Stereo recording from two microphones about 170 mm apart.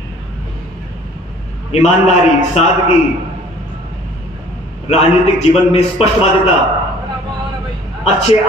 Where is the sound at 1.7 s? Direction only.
40° left (ahead or behind).